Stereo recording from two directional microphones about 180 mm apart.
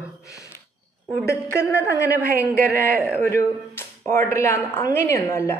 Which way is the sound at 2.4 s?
60° right (ahead or behind).